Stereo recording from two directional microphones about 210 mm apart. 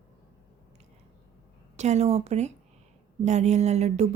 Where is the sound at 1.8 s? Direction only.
30° right (ahead or behind).